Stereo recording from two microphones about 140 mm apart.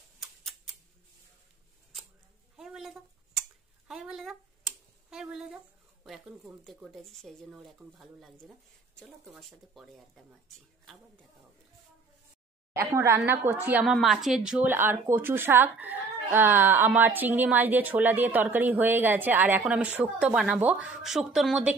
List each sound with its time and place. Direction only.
2.5 s a sound: centre (ahead or behind)
6.0 s speech: centre (ahead or behind)
12.7 s speech: 20° right (ahead or behind)
13.9 s speech: centre (ahead or behind)
14.7 s speech: 15° right (ahead or behind)